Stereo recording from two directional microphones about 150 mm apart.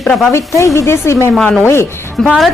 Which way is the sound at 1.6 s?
15° left (ahead or behind).